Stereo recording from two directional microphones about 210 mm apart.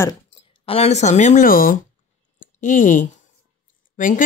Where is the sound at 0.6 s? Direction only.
30° left (ahead or behind).